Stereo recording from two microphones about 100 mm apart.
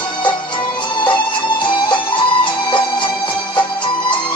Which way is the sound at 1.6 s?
55° left (ahead or behind).